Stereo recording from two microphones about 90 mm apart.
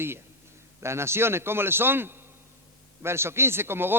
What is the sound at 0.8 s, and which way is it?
A man's voice, 30° right (ahead or behind).